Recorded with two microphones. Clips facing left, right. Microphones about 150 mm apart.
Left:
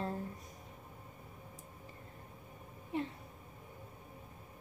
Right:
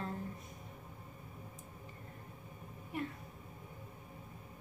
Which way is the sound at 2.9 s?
25° left (ahead or behind).